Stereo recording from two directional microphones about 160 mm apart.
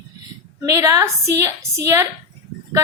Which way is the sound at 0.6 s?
20° right (ahead or behind).